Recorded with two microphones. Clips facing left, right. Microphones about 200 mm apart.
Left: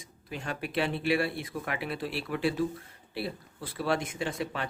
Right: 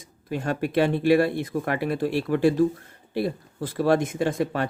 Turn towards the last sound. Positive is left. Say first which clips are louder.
# right 9 dB
turn(degrees=-45)  # may be behind; listen again after turning